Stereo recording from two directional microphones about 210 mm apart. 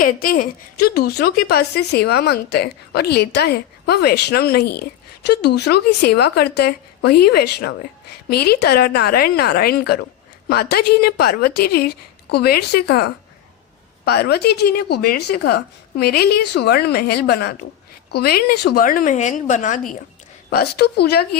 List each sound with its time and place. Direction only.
0.0 s a woman's voice: 40° left (ahead or behind)